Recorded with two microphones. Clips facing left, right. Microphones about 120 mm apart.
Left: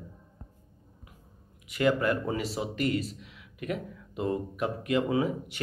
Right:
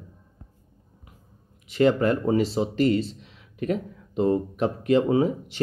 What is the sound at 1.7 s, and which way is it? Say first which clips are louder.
Speech: right 5 dB; 30° right (ahead or behind).